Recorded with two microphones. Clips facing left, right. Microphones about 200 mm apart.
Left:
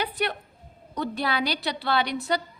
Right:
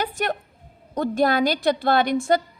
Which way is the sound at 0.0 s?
45° right (ahead or behind).